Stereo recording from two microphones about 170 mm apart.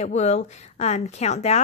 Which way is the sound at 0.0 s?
40° left (ahead or behind).